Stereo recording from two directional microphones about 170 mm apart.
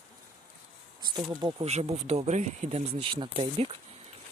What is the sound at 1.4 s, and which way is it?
Speech, 35° right (ahead or behind).